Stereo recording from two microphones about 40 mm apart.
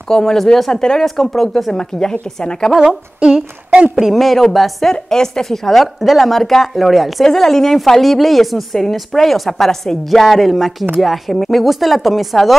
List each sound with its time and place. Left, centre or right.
0.1 s a woman's voice: centre
2.8 s a sound: centre
4.1 s a woman's voice: centre
7.2 s a woman's voice: centre